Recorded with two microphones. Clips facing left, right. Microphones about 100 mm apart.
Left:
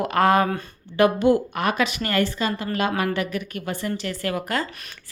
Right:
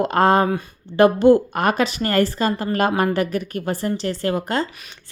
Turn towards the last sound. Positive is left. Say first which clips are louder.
# right 4 dB
turn(degrees=-30)  # may be behind; listen again after turning